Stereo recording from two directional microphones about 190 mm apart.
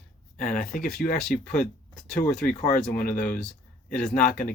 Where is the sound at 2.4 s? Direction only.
45° left (ahead or behind).